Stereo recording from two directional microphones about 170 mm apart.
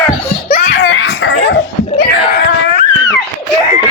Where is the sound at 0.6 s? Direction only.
90° left.